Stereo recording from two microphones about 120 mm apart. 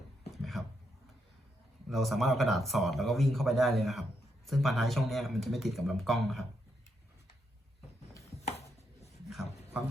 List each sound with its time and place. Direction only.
0.3 s a sound: centre (ahead or behind)
1.9 s speech: centre (ahead or behind)
8.4 s chopping: 65° left (ahead or behind)